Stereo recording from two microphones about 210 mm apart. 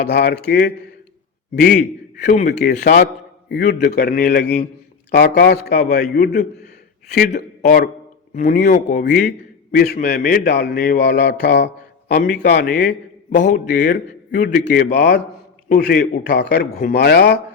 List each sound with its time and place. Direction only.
0.0 s a man's voice: 50° left (ahead or behind)
9.0 s a man's voice: 55° left (ahead or behind)
13.5 s a man's voice: 40° left (ahead or behind)